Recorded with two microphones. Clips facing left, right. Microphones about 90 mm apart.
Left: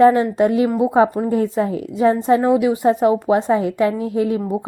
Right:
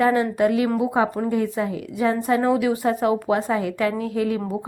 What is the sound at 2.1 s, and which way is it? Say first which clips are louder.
A woman's voice: left 2 dB; 20° left (ahead or behind).